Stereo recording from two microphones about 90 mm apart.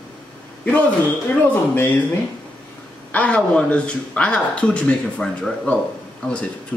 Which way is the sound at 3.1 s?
15° left (ahead or behind).